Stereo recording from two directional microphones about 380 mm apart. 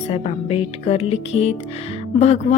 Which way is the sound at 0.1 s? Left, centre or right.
Centre.